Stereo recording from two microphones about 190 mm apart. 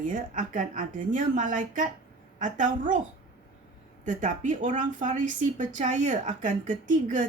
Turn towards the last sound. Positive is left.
turn(degrees=-40)  # may be behind; listen again after turning